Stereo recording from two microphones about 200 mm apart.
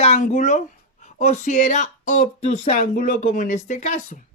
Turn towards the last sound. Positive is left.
turn(degrees=40)  # may be behind; listen again after turning